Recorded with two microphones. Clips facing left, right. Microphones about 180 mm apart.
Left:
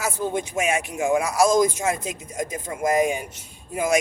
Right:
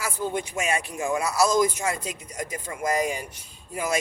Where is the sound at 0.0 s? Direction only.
20° left (ahead or behind).